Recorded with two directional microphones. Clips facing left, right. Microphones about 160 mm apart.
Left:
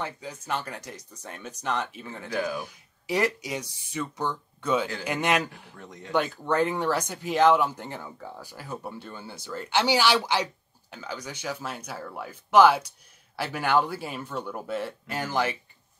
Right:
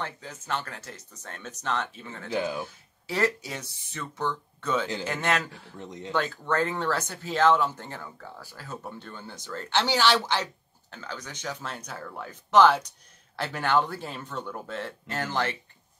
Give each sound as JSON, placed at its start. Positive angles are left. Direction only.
{"t": 0.0, "sound": "speech", "side_deg": 15}
{"t": 2.3, "sound": "speech", "side_deg": -20}
{"t": 2.6, "sound": "speech", "side_deg": 15}
{"t": 5.8, "sound": "speech", "side_deg": -20}
{"t": 6.1, "sound": "speech", "side_deg": 15}